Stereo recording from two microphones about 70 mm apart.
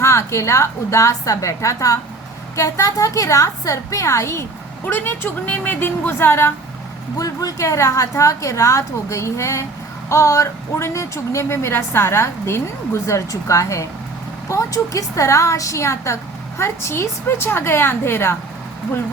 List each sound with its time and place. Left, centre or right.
0.0 s a woman's voice: left
4.9 s a woman's voice: left
7.2 s a woman's voice: left